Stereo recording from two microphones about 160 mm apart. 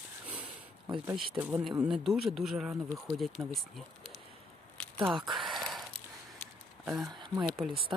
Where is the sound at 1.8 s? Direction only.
Centre (ahead or behind).